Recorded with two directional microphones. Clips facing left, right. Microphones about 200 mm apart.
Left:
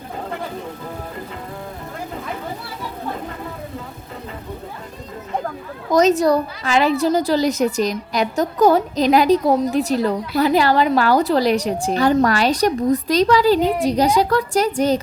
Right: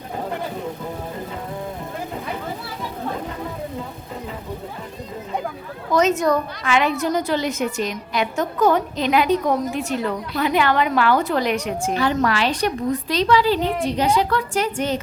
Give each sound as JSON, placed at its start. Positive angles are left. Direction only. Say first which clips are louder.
{"t": 5.9, "sound": "a woman's voice", "louder": "left 3 dB", "side_deg": 35}